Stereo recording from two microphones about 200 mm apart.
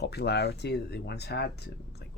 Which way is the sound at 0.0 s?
55° left (ahead or behind).